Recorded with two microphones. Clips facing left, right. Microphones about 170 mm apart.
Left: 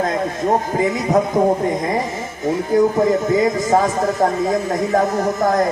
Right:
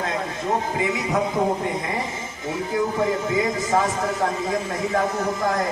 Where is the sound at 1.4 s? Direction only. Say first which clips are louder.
Left 6 dB; 45° left (ahead or behind).